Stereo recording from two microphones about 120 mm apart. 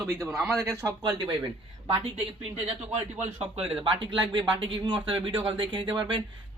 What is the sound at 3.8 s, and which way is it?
Speech, 45° right (ahead or behind).